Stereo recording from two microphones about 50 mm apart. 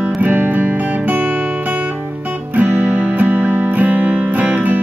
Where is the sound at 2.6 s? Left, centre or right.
Right.